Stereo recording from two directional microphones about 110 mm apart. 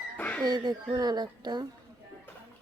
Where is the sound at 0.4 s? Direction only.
35° right (ahead or behind).